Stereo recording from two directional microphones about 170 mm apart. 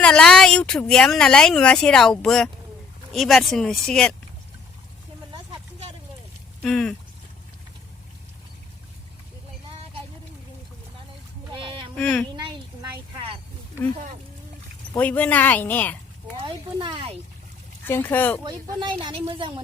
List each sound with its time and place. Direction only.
0.0 s speech: 5° left (ahead or behind)
6.6 s speech: 5° left (ahead or behind)
11.5 s a sound: 30° right (ahead or behind)
11.9 s speech: 5° left (ahead or behind)
14.9 s speech: 10° left (ahead or behind)
16.4 s speech: 30° right (ahead or behind)
17.8 s speech: 10° left (ahead or behind)
18.4 s speech: 25° right (ahead or behind)